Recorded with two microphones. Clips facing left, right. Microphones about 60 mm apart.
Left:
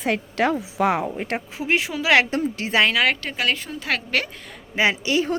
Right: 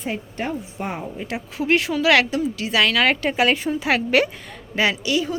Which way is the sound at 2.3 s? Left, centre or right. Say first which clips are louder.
Even; left.